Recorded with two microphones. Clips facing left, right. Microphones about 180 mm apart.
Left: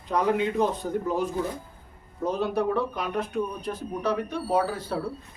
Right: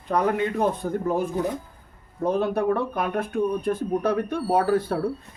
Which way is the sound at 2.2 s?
55° right (ahead or behind).